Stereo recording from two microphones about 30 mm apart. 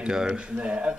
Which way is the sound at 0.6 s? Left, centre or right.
Right.